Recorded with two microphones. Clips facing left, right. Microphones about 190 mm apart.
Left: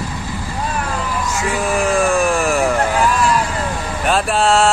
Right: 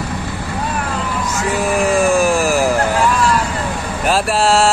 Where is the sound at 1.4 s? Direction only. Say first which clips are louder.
Right 2 dB; centre (ahead or behind).